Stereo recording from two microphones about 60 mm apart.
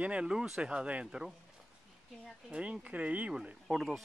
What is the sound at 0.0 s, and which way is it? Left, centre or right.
Speech, centre.